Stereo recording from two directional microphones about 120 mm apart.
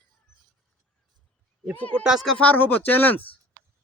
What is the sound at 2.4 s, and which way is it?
Speech, 15° left (ahead or behind).